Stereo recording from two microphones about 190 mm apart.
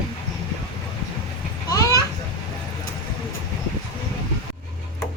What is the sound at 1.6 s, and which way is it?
Children playing, 20° left (ahead or behind).